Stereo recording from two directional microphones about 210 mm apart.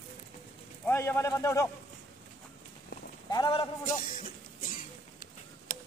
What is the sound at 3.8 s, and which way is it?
Cough, 40° left (ahead or behind).